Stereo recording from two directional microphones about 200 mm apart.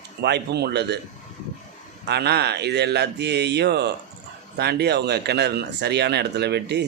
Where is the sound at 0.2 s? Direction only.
55° right (ahead or behind).